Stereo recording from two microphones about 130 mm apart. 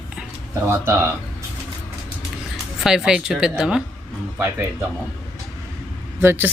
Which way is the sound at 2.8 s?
5° right (ahead or behind).